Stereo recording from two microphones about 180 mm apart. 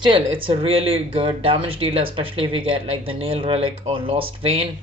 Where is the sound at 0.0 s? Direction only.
30° right (ahead or behind).